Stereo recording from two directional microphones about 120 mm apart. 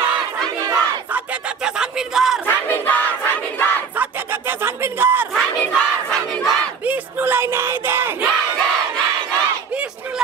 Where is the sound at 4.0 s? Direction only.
15° right (ahead or behind).